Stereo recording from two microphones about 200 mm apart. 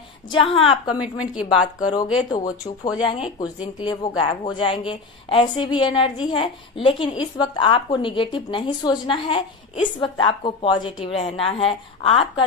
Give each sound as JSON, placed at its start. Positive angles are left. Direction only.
{"t": 0.3, "sound": "a woman's voice", "side_deg": 25}
{"t": 0.9, "sound": "a woman's voice", "side_deg": -5}
{"t": 2.3, "sound": "a woman's voice", "side_deg": 20}